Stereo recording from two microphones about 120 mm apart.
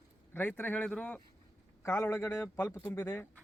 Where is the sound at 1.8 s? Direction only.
20° left (ahead or behind).